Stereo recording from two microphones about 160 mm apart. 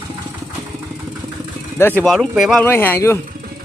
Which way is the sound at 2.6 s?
15° left (ahead or behind).